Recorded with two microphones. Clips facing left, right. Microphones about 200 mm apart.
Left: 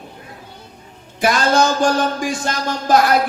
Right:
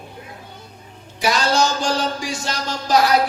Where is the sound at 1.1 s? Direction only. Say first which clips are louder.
Left 3 dB; 55° left (ahead or behind).